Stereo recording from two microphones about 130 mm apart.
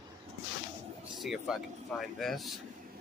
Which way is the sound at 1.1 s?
Centre (ahead or behind).